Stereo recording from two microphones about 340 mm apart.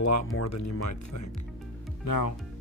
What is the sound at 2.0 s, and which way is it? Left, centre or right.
Speech, left.